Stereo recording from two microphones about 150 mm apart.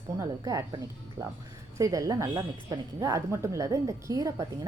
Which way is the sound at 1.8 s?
20° right (ahead or behind).